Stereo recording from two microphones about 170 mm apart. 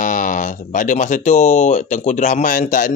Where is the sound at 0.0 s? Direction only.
50° left (ahead or behind).